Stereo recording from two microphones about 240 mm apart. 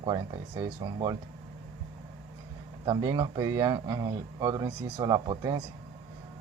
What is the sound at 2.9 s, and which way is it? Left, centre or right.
Speech, centre.